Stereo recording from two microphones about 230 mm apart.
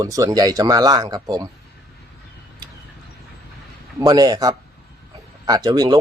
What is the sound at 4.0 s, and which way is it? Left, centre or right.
Speech, centre.